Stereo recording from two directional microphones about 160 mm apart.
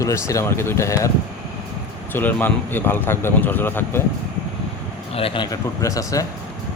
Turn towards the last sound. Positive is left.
turn(degrees=20)  # may be behind; listen again after turning